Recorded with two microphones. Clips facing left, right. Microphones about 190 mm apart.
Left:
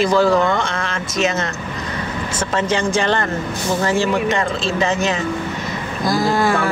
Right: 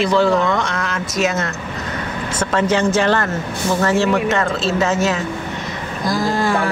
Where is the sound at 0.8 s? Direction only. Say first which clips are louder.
Even; centre (ahead or behind).